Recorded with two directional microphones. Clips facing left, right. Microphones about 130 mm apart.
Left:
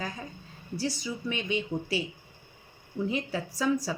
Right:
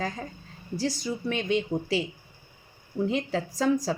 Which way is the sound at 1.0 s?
55° right (ahead or behind).